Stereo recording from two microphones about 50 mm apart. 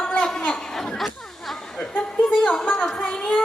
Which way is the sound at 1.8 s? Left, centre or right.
Centre.